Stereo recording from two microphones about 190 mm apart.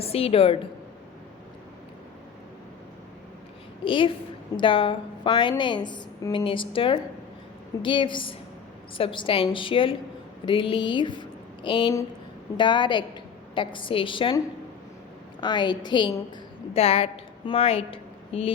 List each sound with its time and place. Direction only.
0.0 s a woman's voice: 30° left (ahead or behind)
3.8 s a woman's voice: 25° left (ahead or behind)